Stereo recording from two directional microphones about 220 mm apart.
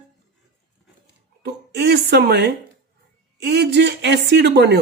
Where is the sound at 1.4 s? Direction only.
50° right (ahead or behind).